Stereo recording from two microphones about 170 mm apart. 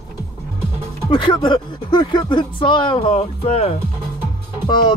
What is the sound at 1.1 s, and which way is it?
Speech, 30° left (ahead or behind).